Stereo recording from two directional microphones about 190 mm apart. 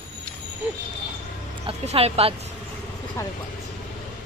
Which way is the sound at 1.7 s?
30° right (ahead or behind).